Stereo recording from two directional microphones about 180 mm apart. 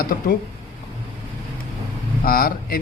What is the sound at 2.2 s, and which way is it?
Speech, 55° left (ahead or behind).